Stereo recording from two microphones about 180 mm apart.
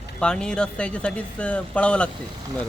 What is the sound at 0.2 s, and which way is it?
Speech, 5° left (ahead or behind).